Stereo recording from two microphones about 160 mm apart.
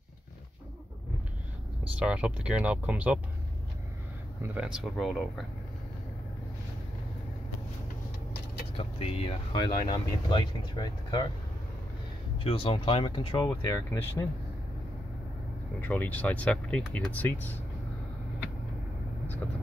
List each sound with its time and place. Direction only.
2.0 s speech: 5° right (ahead or behind)
4.6 s speech: 5° right (ahead or behind)
8.7 s speech: 35° left (ahead or behind)
12.4 s speech: 35° left (ahead or behind)
13.7 s speech: 15° left (ahead or behind)
15.8 s speech: 10° left (ahead or behind)